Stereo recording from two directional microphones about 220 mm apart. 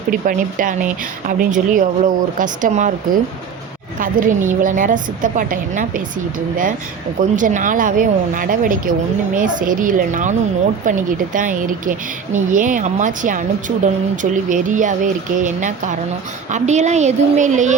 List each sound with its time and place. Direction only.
0.1 s speech: 40° right (ahead or behind)
4.0 s speech: 35° right (ahead or behind)
7.2 s speech: 35° right (ahead or behind)